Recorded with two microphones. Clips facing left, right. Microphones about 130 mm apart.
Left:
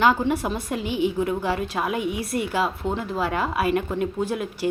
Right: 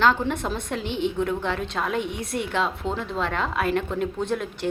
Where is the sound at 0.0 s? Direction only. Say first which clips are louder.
Left 2 dB; 10° left (ahead or behind).